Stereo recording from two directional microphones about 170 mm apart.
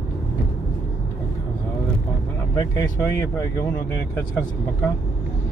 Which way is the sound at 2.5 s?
25° left (ahead or behind).